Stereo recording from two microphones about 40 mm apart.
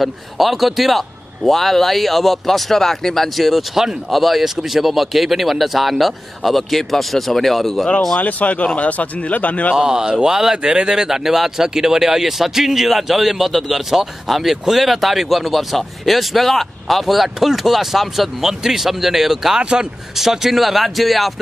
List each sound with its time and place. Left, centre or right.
0.0 s speech: centre
3.3 s speech: centre
8.2 s a man's voice: left
9.8 s a man's voice: centre
19.6 s speech: right
20.2 s speech: centre